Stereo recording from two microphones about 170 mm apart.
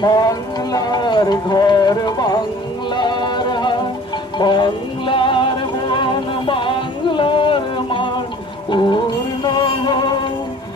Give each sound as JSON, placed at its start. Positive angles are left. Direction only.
{"t": 0.0, "sound": "speech", "side_deg": 25}
{"t": 2.9, "sound": "music", "side_deg": 25}